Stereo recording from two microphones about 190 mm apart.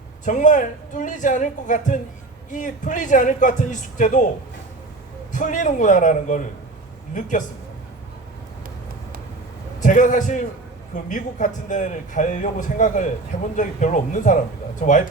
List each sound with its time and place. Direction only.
0.3 s a man's voice: 40° left (ahead or behind)
5.3 s a man's voice: 45° left (ahead or behind)
9.8 s a man's voice: 40° left (ahead or behind)